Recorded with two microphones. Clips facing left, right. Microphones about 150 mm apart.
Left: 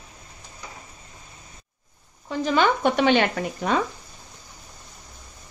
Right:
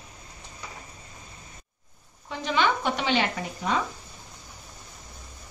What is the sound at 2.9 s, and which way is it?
Speech, 60° left (ahead or behind).